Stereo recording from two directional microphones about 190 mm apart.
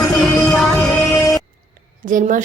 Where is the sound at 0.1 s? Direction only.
Centre (ahead or behind).